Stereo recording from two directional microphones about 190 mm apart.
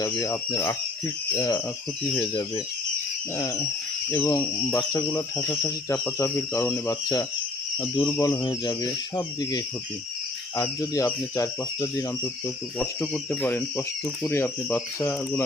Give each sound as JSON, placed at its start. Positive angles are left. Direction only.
{"t": 0.0, "sound": "speech", "side_deg": 15}
{"t": 3.3, "sound": "speech", "side_deg": 15}